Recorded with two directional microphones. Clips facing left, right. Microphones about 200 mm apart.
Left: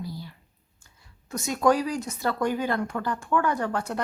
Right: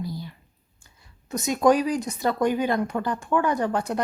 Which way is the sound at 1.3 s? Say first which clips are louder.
Right 3 dB; 20° right (ahead or behind).